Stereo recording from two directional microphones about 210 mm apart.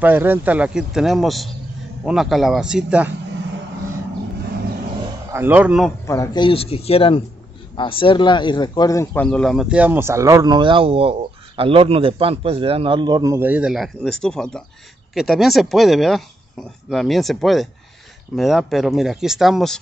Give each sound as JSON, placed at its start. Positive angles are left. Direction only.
{"t": 0.0, "sound": "speech", "side_deg": -10}
{"t": 5.3, "sound": "speech", "side_deg": -10}
{"t": 6.0, "sound": "speech", "side_deg": 15}